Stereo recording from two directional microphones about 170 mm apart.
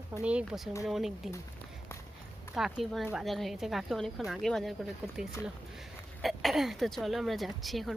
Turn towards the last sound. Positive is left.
turn(degrees=0)  # may be behind; listen again after turning